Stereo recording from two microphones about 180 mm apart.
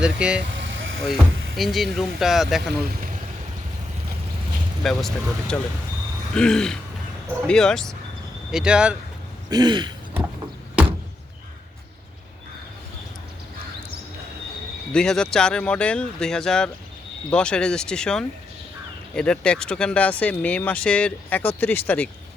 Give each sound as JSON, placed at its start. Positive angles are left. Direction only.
{"t": 0.0, "sound": "speech", "side_deg": -5}
{"t": 0.5, "sound": "vehicle", "side_deg": -90}
{"t": 1.0, "sound": "speech", "side_deg": 0}
{"t": 4.8, "sound": "speech", "side_deg": 0}
{"t": 9.5, "sound": "throat clearing", "side_deg": -25}
{"t": 14.9, "sound": "speech", "side_deg": 5}